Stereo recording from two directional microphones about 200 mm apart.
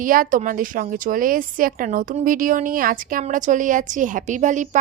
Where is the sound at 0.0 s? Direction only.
45° right (ahead or behind).